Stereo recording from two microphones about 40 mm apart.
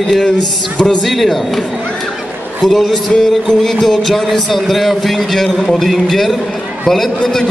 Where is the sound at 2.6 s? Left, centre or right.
Centre.